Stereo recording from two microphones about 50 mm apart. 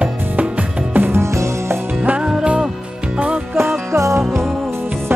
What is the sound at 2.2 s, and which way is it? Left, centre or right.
Music, centre.